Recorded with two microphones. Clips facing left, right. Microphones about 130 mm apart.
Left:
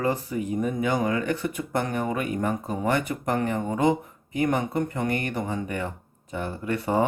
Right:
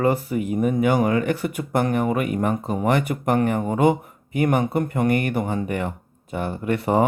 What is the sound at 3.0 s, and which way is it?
Speech, 60° right (ahead or behind).